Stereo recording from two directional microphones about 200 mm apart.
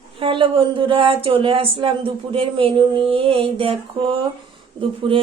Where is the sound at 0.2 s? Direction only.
25° right (ahead or behind).